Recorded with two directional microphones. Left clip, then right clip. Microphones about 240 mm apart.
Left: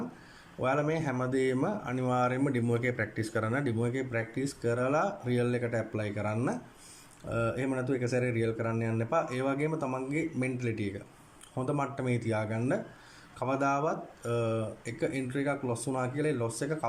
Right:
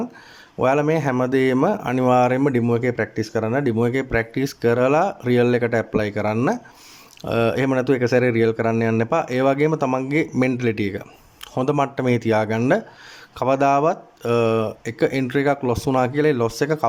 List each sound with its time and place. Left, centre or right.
0.6 s a man's voice: right